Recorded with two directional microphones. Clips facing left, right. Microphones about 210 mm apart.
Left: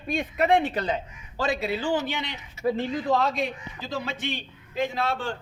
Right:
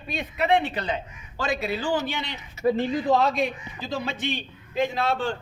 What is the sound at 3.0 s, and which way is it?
A man's voice, 15° right (ahead or behind).